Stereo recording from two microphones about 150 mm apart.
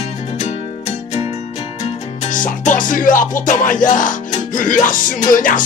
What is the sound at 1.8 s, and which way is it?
Music, 60° left (ahead or behind).